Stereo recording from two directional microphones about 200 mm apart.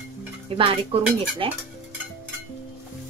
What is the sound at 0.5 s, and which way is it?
A woman's voice, 25° right (ahead or behind).